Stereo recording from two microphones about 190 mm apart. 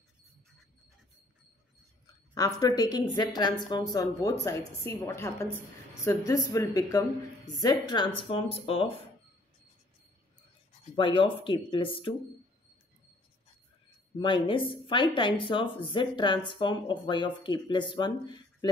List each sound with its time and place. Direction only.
2.3 s a woman's voice: 20° left (ahead or behind)
11.0 s speech: 25° left (ahead or behind)
14.1 s speech: 25° left (ahead or behind)